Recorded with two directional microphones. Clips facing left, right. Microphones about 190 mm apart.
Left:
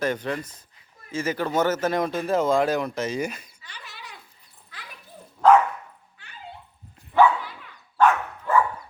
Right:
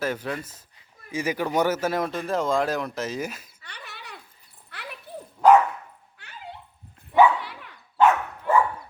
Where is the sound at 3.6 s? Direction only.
60° right (ahead or behind).